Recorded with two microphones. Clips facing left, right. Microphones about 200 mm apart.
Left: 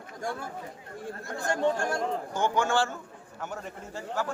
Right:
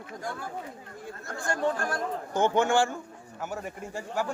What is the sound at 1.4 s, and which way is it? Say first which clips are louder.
Speech: left 2 dB; 25° left (ahead or behind).